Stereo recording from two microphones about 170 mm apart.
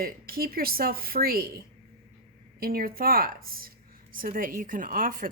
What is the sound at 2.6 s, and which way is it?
A woman's voice, 60° right (ahead or behind).